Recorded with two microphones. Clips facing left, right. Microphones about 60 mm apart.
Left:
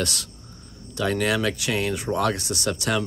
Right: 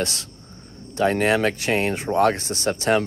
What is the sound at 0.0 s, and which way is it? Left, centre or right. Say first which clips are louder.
Speech: right 1 dB; right.